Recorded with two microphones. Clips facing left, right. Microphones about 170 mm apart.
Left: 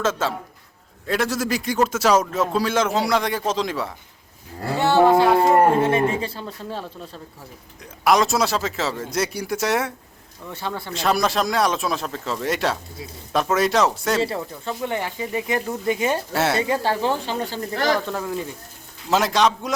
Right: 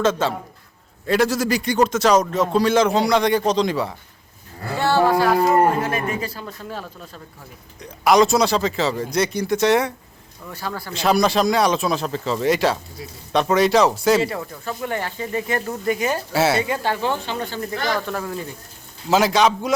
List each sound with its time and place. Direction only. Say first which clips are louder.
0.0 s speech: right 3 dB; centre (ahead or behind)
4.8 s speech: left 2 dB; 20° left (ahead or behind)
7.8 s speech: right 3 dB; centre (ahead or behind)
10.9 s speech: right 3 dB; centre (ahead or behind)
14.2 s speech: even; 25° left (ahead or behind)
15.9 s speech: even; 25° left (ahead or behind)
16.3 s speech: right 6 dB; centre (ahead or behind)
16.6 s speech: left 1 dB; 35° left (ahead or behind)
18.1 s speech: even; 10° left (ahead or behind)
19.0 s speech: right 2 dB; centre (ahead or behind)